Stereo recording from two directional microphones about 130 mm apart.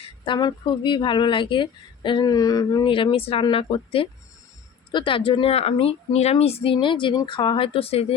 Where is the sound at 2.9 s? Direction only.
40° left (ahead or behind).